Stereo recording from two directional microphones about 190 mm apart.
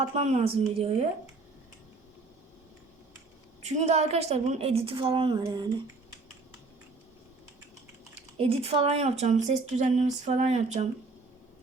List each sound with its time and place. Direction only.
0.2 s speech: 35° right (ahead or behind)
3.6 s speech: 35° right (ahead or behind)
8.4 s speech: 30° right (ahead or behind)